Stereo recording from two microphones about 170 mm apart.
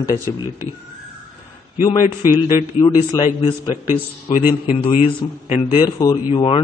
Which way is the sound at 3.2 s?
30° left (ahead or behind).